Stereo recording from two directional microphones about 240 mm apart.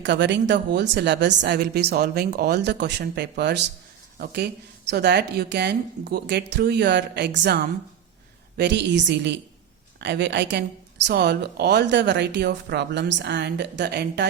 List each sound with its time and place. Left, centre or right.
0.0 s a woman's voice: right